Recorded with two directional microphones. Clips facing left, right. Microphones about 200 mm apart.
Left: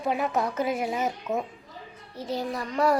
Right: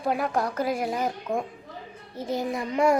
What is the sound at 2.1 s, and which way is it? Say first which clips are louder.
Speech: right 2 dB; 50° right (ahead or behind).